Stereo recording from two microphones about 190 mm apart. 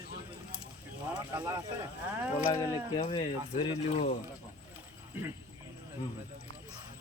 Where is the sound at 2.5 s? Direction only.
20° left (ahead or behind).